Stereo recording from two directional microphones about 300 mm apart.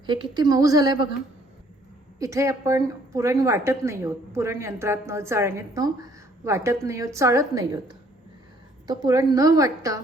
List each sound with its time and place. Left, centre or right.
0.0 s a woman's voice: centre
2.1 s a woman's voice: centre